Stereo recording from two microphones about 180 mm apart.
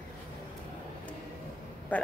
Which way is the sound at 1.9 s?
10° left (ahead or behind).